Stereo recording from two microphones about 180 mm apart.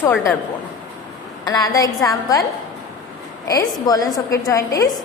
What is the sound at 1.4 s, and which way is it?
Speech, 20° left (ahead or behind).